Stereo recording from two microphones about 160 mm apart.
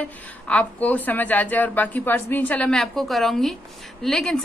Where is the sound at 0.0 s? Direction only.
10° left (ahead or behind).